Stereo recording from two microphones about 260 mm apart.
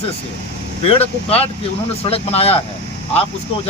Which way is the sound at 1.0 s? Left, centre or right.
Left.